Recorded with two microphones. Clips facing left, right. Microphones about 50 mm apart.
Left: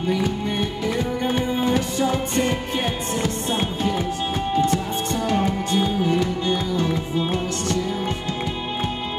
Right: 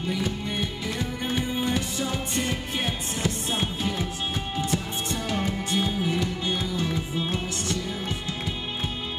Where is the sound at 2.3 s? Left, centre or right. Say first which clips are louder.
Left 6 dB; left.